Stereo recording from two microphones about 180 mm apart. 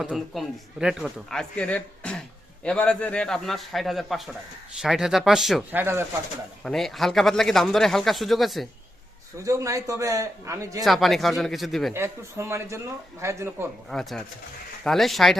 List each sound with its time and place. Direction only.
0.0 s speech: 5° right (ahead or behind)
5.8 s speech: 15° right (ahead or behind)
6.6 s speech: centre (ahead or behind)
9.4 s speech: 15° right (ahead or behind)
10.8 s speech: centre (ahead or behind)
11.9 s speech: 15° right (ahead or behind)
13.9 s speech: centre (ahead or behind)